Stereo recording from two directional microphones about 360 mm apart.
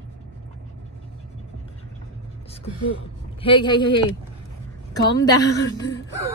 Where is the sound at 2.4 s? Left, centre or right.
Centre.